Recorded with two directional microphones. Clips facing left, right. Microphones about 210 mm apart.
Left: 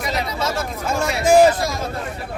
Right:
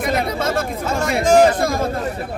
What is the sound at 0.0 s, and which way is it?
Chatter, 55° right (ahead or behind).